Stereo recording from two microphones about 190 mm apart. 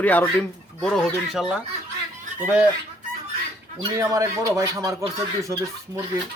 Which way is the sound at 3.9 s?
20° right (ahead or behind).